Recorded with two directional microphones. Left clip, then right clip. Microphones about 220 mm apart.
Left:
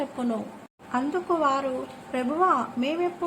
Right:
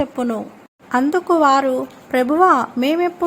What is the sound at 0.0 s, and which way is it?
Speech, 30° right (ahead or behind).